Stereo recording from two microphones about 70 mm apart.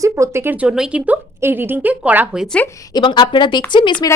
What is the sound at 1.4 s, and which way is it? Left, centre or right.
Speech, right.